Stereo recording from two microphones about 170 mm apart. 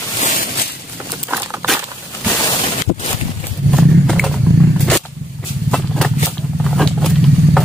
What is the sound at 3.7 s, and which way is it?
Horse, centre (ahead or behind).